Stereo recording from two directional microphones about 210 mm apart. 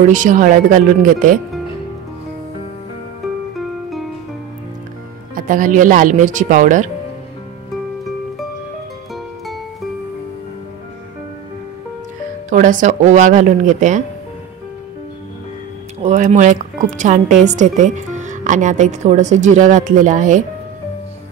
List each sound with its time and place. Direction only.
0.1 s a woman's voice: 35° right (ahead or behind)
3.5 s music: centre (ahead or behind)
5.3 s a woman's voice: 40° right (ahead or behind)
9.1 s music: centre (ahead or behind)
12.4 s a woman's voice: 35° right (ahead or behind)
16.0 s a woman's voice: 35° right (ahead or behind)